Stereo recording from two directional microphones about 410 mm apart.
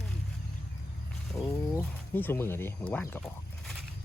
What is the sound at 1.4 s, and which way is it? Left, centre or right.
Speech, centre.